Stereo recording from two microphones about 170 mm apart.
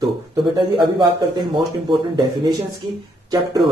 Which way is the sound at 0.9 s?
25° right (ahead or behind).